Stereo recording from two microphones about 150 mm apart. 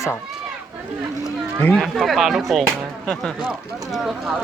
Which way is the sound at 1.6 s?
10° left (ahead or behind).